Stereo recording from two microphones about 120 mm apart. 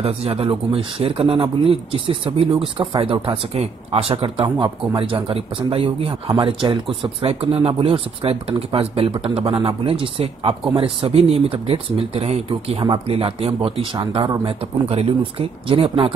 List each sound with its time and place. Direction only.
0.0 s speech: 55° right (ahead or behind)